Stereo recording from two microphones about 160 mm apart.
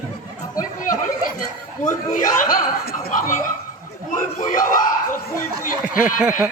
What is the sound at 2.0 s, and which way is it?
Speech, 55° left (ahead or behind).